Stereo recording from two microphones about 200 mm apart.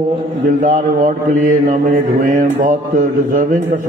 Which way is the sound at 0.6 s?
40° right (ahead or behind).